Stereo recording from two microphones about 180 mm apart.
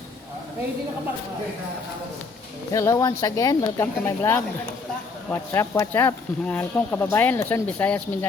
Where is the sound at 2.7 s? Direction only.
15° left (ahead or behind).